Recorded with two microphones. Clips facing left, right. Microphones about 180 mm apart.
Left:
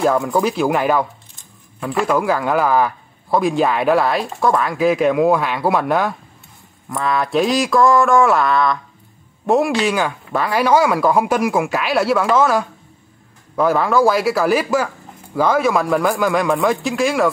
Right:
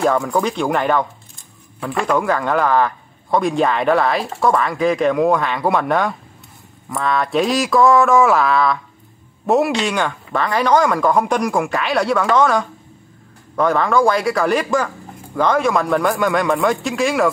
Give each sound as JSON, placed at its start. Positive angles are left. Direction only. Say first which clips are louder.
{"t": 0.0, "sound": "a man's voice", "louder": "left 1 dB", "side_deg": 0}